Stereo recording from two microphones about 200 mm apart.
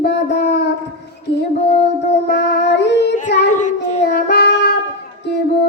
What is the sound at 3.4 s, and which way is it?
Child singing, 40° left (ahead or behind).